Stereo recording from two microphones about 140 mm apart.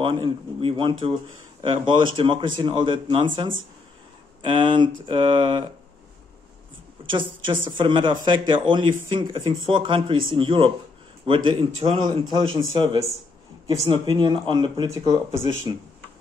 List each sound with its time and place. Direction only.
0.0 s speech: 35° right (ahead or behind)
7.1 s speech: 35° right (ahead or behind)
13.8 s speech: 30° right (ahead or behind)